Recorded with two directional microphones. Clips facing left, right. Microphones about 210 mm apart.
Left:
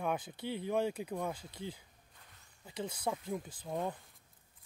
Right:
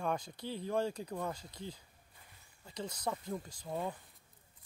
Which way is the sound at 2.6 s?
10° left (ahead or behind).